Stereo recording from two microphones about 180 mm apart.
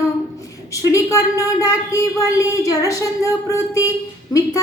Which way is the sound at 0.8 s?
20° left (ahead or behind).